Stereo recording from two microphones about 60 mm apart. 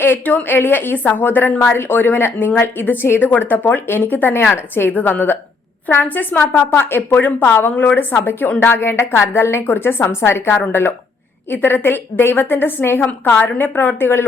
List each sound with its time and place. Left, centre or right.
0.0 s a woman's voice: left